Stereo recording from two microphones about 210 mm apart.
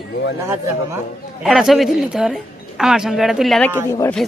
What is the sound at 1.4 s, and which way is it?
Speech, centre (ahead or behind).